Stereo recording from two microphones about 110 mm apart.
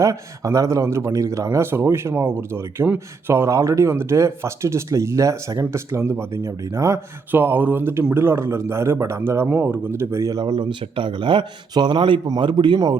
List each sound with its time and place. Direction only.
0.0 s speech: 30° right (ahead or behind)
10.4 s speech: 45° right (ahead or behind)